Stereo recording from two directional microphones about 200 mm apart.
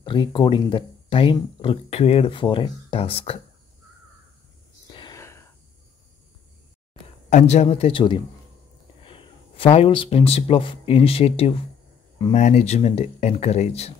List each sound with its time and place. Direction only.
0.0 s speech: 25° left (ahead or behind)
4.8 s whispering: 20° left (ahead or behind)
6.9 s speech: 35° left (ahead or behind)